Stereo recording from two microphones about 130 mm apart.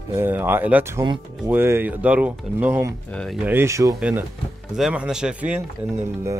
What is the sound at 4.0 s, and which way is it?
Speech, 10° right (ahead or behind).